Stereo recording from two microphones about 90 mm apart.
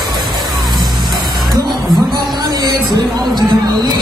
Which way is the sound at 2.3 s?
50° right (ahead or behind).